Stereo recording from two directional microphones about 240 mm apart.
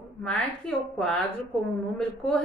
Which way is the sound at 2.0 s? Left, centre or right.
Centre.